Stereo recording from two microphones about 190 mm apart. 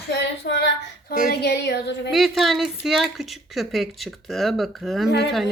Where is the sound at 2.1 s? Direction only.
Centre (ahead or behind).